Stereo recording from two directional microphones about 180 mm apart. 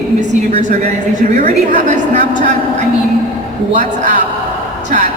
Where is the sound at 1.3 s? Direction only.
40° right (ahead or behind).